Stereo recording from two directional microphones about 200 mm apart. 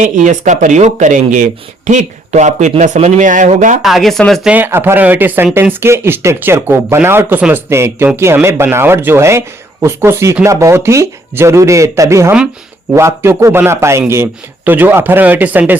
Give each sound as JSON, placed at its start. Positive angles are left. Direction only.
{"t": 0.0, "sound": "speech", "side_deg": -40}
{"t": 3.8, "sound": "speech", "side_deg": 0}
{"t": 4.5, "sound": "speech", "side_deg": -10}